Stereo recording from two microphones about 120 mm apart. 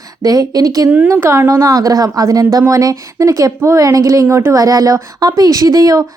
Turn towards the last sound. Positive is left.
turn(degrees=-30)  # may be behind; listen again after turning